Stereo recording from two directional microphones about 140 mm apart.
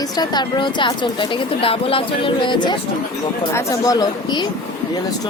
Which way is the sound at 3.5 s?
25° left (ahead or behind).